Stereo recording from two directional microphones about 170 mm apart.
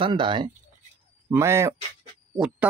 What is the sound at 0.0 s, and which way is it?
Speech, 30° right (ahead or behind).